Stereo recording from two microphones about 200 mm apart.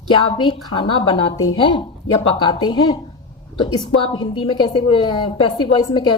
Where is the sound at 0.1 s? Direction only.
25° left (ahead or behind).